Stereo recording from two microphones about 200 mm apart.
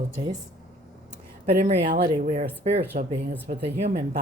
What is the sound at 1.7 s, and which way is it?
Speech, 55° right (ahead or behind).